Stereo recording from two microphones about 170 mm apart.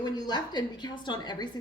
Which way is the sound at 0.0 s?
25° left (ahead or behind).